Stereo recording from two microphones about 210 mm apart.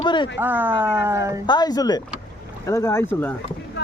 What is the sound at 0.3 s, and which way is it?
Speech, 10° right (ahead or behind).